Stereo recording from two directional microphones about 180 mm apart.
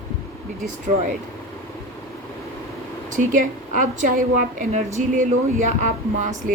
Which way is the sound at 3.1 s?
45° right (ahead or behind).